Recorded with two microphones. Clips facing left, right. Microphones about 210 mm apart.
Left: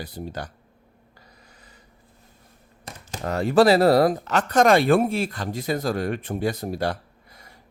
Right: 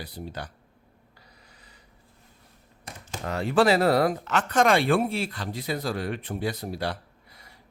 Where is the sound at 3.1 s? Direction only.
45° left (ahead or behind).